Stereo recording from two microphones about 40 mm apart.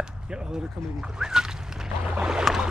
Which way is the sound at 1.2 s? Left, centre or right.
Centre.